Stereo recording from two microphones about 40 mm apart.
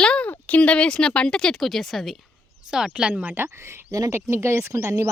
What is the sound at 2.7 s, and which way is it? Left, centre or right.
Speech, centre.